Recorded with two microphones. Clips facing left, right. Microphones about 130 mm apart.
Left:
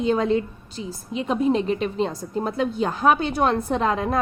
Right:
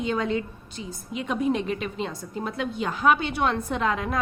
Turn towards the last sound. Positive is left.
turn(degrees=35)  # may be behind; listen again after turning